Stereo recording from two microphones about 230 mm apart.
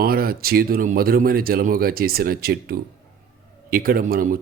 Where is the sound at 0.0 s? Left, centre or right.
Right.